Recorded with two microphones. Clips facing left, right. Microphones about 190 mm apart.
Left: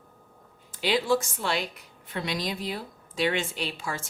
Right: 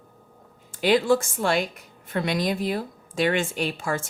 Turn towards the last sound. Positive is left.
turn(degrees=-50)  # may be behind; listen again after turning